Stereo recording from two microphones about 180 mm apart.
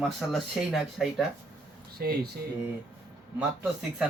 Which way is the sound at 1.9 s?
60° right (ahead or behind).